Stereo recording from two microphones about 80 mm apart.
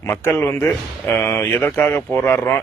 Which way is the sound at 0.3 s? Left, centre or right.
Left.